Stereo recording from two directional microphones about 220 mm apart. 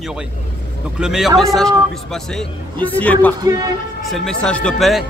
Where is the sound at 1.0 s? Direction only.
Centre (ahead or behind).